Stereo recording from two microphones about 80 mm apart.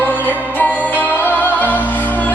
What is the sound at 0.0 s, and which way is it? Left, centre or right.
Music, left.